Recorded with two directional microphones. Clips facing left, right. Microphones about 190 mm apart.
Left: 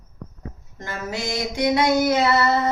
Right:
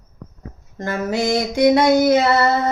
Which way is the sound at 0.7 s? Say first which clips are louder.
Right 8 dB; 55° right (ahead or behind).